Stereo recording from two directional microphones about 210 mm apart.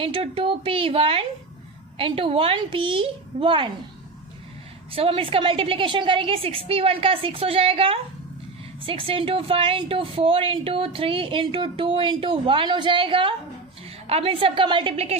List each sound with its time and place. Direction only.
0.0 s speech: 25° right (ahead or behind)
4.9 s speech: 25° right (ahead or behind)